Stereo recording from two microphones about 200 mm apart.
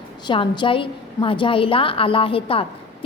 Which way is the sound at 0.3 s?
25° left (ahead or behind).